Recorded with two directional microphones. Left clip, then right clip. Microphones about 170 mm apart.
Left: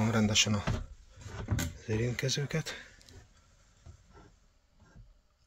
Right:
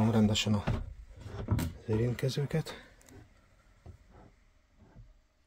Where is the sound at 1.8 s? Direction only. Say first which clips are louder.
Right 2 dB; 15° right (ahead or behind).